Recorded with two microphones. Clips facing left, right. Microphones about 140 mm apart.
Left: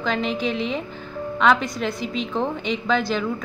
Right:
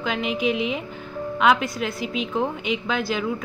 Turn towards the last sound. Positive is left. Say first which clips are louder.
# left 3 dB
turn(degrees=-5)  # may be behind; listen again after turning